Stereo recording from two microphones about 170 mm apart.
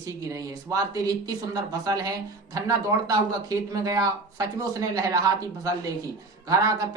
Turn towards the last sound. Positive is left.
turn(degrees=-20)  # may be behind; listen again after turning